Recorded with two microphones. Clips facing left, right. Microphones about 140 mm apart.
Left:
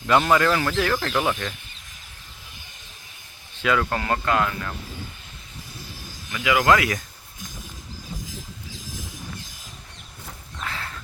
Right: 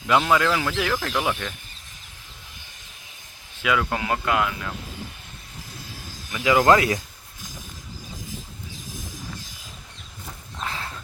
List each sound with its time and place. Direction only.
0.1 s speech: 5° right (ahead or behind)
3.6 s speech: 5° right (ahead or behind)
6.3 s speech: 30° right (ahead or behind)
10.6 s a sound: 20° right (ahead or behind)